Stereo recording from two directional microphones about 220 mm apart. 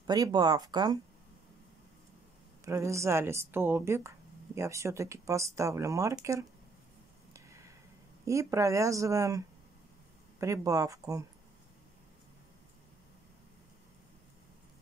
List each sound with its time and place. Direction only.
0.0 s speech: 20° right (ahead or behind)
2.6 s speech: 15° right (ahead or behind)
7.3 s a sound: 15° right (ahead or behind)
8.3 s speech: 15° right (ahead or behind)
10.4 s speech: 15° right (ahead or behind)